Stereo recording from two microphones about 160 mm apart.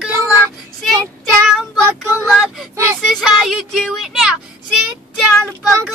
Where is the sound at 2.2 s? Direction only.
Centre (ahead or behind).